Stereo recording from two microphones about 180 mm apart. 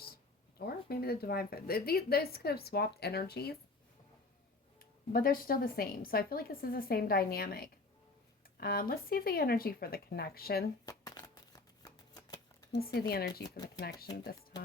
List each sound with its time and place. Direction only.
0.6 s a woman's voice: 60° left (ahead or behind)
5.1 s a woman's voice: 55° left (ahead or behind)
10.8 s shuffling cards: 20° left (ahead or behind)
12.7 s a woman's voice: 60° left (ahead or behind)
14.1 s speech: 20° left (ahead or behind)